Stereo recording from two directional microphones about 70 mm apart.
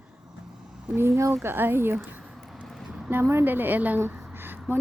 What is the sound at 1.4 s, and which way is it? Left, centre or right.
Speech, right.